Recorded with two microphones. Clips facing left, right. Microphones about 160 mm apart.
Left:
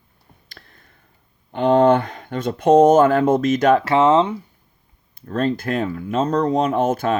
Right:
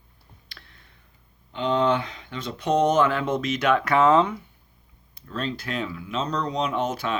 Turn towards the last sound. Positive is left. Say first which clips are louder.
# left 7 dB
turn(degrees=50)  # may be behind; listen again after turning